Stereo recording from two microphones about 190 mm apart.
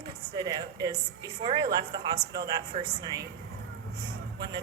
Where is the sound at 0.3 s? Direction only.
20° right (ahead or behind).